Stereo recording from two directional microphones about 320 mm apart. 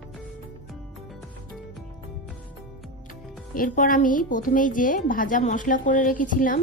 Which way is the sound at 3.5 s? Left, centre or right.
Left.